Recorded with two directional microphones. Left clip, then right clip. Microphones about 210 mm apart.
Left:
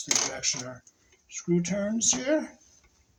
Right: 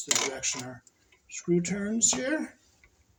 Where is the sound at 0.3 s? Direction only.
25° left (ahead or behind).